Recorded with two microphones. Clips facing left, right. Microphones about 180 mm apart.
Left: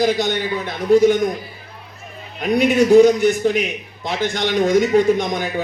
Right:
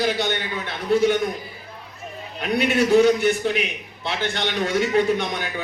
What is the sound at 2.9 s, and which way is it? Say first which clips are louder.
A man's voice: left 5 dB; 45° left (ahead or behind).